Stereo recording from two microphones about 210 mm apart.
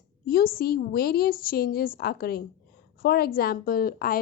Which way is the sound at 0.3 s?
45° left (ahead or behind).